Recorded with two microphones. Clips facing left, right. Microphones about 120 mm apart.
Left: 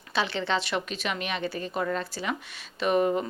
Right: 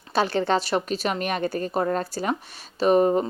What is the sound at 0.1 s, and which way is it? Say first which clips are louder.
A woman's voice: right 6 dB; 45° right (ahead or behind).